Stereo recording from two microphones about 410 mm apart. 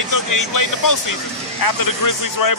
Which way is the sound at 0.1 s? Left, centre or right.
Left.